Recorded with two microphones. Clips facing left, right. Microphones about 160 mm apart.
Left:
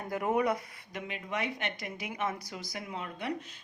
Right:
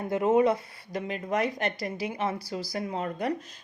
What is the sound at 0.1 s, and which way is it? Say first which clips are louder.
Speech: right 6 dB; 25° right (ahead or behind).